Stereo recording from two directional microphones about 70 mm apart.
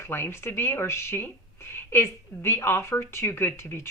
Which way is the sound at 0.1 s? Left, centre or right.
Left.